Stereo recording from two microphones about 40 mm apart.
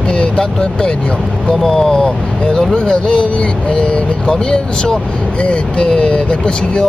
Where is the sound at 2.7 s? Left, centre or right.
Left.